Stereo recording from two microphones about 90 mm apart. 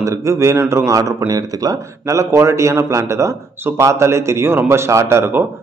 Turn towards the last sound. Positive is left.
turn(degrees=-30)  # may be behind; listen again after turning